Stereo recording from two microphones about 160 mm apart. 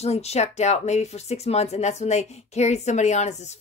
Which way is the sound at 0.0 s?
40° left (ahead or behind).